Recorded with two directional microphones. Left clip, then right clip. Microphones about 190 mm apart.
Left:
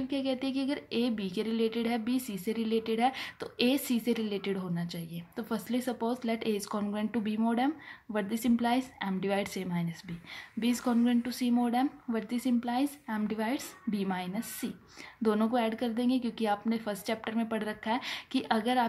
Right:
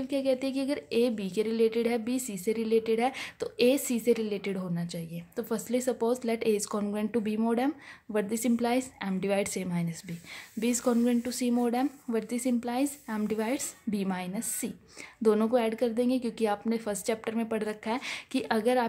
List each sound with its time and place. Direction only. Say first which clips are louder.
0.1 s speech: right 6 dB; 30° right (ahead or behind)